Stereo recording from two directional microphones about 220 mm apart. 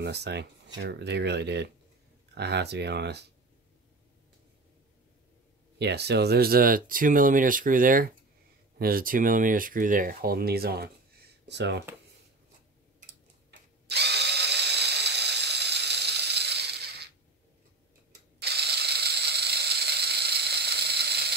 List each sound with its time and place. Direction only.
0.0 s speech: 50° right (ahead or behind)
5.8 s speech: 50° right (ahead or behind)
13.5 s drill: 50° right (ahead or behind)
18.4 s ratchet: 45° right (ahead or behind)